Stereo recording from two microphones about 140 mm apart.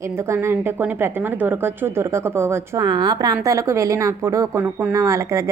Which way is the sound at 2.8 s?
30° right (ahead or behind).